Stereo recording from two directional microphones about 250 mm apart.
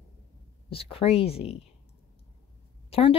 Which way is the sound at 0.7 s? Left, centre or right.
Left.